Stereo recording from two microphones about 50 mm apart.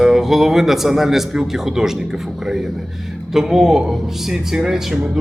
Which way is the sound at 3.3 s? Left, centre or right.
Centre.